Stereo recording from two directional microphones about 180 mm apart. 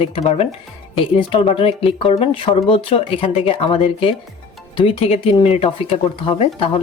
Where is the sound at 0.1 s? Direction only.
35° left (ahead or behind).